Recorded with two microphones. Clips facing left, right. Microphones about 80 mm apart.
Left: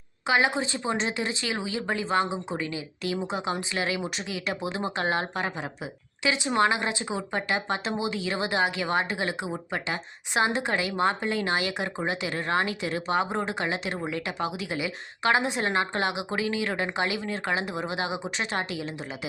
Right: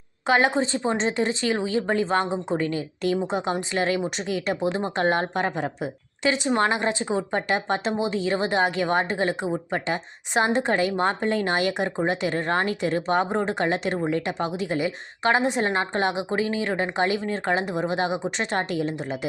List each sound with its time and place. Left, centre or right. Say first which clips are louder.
0.3 s a woman's voice: right 4 dB; right
2.2 s a woman's voice: right 5 dB; centre
2.6 s a woman's voice: right 6 dB; right